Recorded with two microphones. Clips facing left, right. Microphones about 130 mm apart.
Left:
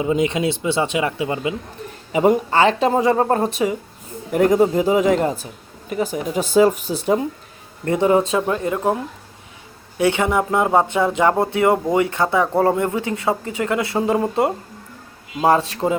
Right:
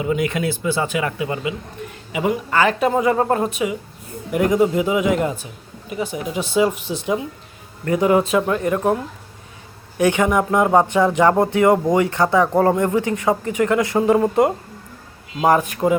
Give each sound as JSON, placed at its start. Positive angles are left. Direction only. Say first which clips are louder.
{"t": 0.0, "sound": "speech", "louder": "left 2 dB", "side_deg": 20}
{"t": 1.8, "sound": "a sound", "louder": "right 1 dB", "side_deg": 35}
{"t": 2.1, "sound": "speech", "louder": "left 6 dB", "side_deg": 40}
{"t": 2.5, "sound": "speech", "louder": "left 1 dB", "side_deg": 30}
{"t": 7.9, "sound": "speech", "louder": "even", "side_deg": 30}
{"t": 10.0, "sound": "speech", "louder": "right 1 dB", "side_deg": 20}
{"t": 15.4, "sound": "speech", "louder": "even", "side_deg": 30}